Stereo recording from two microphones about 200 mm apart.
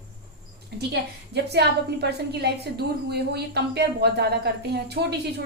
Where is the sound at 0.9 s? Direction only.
55° right (ahead or behind).